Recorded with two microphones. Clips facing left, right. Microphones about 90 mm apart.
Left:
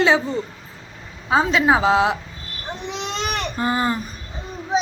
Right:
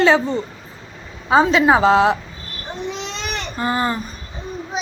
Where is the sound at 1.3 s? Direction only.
Centre (ahead or behind).